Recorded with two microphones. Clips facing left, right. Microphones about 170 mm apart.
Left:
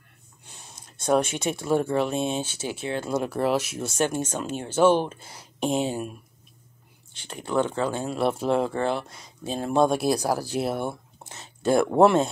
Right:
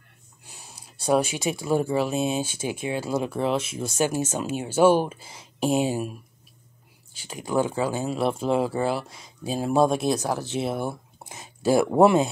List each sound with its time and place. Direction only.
0.5 s speech: 5° right (ahead or behind)
7.2 s speech: 5° right (ahead or behind)
11.2 s speech: 10° right (ahead or behind)